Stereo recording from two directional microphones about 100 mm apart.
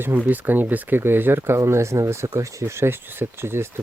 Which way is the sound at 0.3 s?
20° right (ahead or behind).